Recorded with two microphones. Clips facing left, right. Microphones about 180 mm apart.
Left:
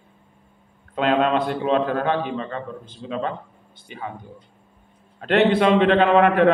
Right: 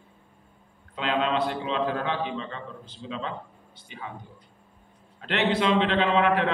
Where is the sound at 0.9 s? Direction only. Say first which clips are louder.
Left 7 dB; 50° left (ahead or behind).